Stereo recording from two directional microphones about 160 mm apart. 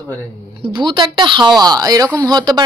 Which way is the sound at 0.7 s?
30° right (ahead or behind).